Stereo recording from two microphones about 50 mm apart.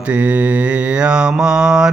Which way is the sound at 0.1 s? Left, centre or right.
Right.